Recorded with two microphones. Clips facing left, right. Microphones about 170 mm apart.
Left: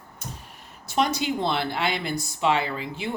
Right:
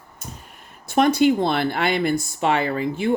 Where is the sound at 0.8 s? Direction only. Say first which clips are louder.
Right 8 dB; 55° right (ahead or behind).